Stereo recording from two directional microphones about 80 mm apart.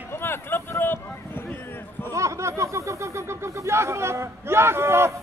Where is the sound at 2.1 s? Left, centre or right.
Right.